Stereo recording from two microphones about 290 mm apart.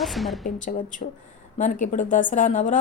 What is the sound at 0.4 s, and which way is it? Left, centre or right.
A woman's voice, left.